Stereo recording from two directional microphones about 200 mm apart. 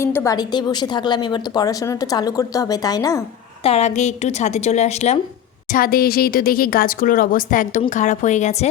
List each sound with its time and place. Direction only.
0.0 s a woman's voice: 15° left (ahead or behind)
3.6 s a woman's voice: 30° left (ahead or behind)
5.7 s speech: 45° left (ahead or behind)